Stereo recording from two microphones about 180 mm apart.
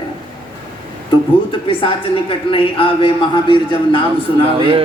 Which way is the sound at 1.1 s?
30° left (ahead or behind).